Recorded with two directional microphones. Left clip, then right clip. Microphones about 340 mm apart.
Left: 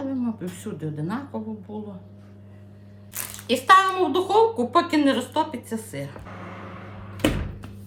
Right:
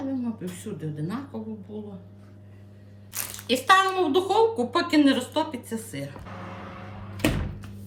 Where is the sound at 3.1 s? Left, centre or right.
Centre.